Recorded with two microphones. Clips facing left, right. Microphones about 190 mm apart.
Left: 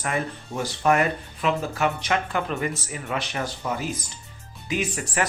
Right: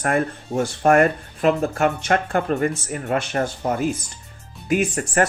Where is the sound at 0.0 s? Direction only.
50° right (ahead or behind).